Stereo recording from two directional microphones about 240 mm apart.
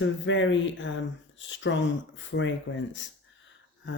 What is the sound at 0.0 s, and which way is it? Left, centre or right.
Speech, left.